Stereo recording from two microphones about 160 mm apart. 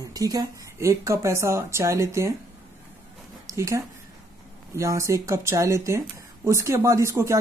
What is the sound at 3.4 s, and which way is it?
Speech, 20° right (ahead or behind).